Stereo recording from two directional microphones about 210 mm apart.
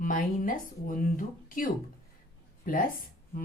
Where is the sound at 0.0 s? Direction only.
40° left (ahead or behind).